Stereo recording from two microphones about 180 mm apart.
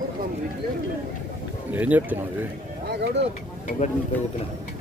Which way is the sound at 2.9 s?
70° right (ahead or behind).